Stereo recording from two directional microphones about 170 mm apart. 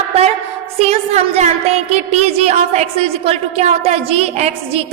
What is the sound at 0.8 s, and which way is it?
A woman's voice, 40° right (ahead or behind).